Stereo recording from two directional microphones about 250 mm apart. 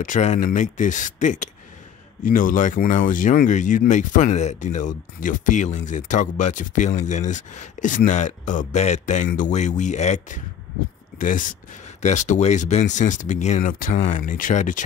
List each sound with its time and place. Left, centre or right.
0.0 s speech: left